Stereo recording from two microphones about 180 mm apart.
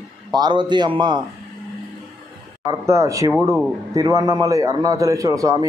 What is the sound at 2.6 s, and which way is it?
A man's voice, 15° right (ahead or behind).